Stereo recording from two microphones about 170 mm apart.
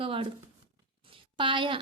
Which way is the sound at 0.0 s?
30° right (ahead or behind).